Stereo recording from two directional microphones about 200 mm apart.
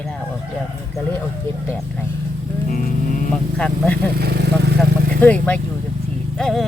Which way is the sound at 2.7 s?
40° left (ahead or behind).